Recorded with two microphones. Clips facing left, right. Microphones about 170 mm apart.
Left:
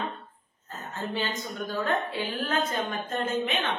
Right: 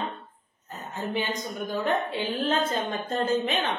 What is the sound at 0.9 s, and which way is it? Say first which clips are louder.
A woman's voice: right 2 dB; 15° right (ahead or behind).